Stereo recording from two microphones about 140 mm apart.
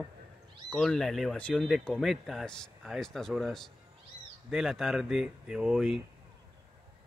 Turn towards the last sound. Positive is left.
turn(degrees=-5)  # may be behind; listen again after turning